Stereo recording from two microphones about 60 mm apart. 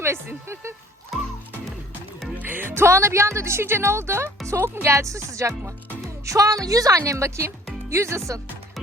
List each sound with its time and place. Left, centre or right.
0.0 s speech: right
2.4 s speech: right
6.9 s speech: right